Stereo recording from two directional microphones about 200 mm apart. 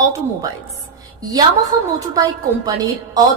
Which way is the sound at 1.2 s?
20° right (ahead or behind).